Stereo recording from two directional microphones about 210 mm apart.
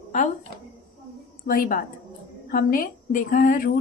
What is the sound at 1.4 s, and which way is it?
Speech, 45° left (ahead or behind).